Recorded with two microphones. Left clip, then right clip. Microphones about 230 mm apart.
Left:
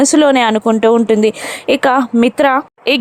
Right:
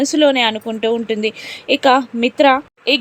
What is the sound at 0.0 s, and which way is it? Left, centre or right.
A woman's voice, left.